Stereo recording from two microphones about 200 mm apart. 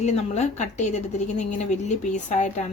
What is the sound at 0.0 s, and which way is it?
Speech, 35° left (ahead or behind).